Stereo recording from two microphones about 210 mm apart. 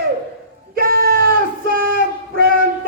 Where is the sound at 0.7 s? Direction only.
45° right (ahead or behind).